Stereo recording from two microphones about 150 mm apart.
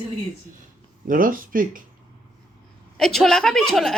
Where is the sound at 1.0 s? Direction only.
70° right (ahead or behind).